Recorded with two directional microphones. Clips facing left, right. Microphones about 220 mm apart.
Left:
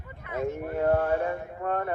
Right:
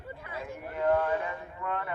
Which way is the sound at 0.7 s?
45° left (ahead or behind).